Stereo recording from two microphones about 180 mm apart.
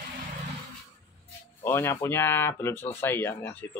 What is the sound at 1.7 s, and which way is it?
Speech, 15° left (ahead or behind).